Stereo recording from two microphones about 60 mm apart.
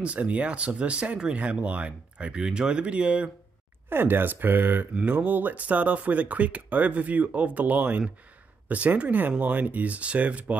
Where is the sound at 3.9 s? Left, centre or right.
Right.